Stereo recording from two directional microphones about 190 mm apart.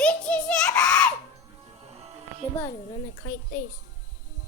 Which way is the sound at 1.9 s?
35° right (ahead or behind).